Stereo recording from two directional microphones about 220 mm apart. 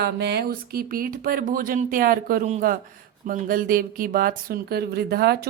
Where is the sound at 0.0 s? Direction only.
50° right (ahead or behind).